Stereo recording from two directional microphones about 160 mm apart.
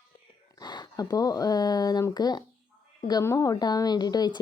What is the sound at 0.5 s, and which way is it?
Speech, 25° left (ahead or behind).